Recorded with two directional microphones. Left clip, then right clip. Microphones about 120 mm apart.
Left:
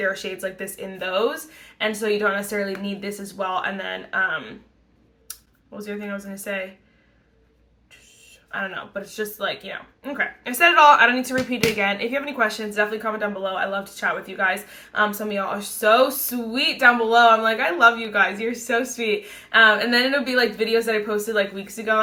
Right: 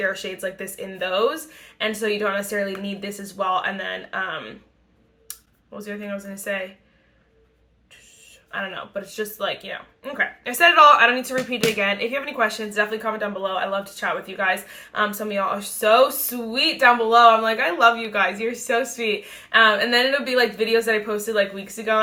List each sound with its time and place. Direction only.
0.0 s speech: 20° right (ahead or behind)
8.4 s speech: 20° right (ahead or behind)